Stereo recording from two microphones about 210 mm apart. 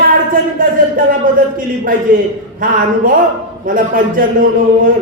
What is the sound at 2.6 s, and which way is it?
Speech, 40° right (ahead or behind).